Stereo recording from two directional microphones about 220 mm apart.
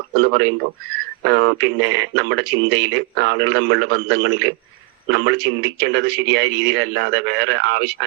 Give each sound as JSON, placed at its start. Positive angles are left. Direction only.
{"t": 0.2, "sound": "speech", "side_deg": -55}